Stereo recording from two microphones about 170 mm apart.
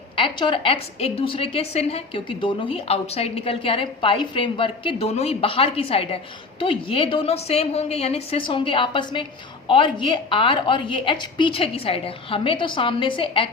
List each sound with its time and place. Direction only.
0.2 s a woman's voice: 30° left (ahead or behind)